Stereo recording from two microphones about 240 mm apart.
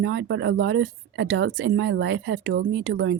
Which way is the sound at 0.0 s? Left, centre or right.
Right.